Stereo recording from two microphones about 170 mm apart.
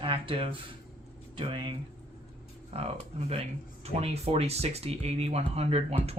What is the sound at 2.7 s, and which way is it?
Speech, 35° right (ahead or behind).